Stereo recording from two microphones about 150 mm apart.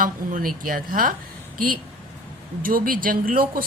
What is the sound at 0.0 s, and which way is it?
Speech, 65° right (ahead or behind).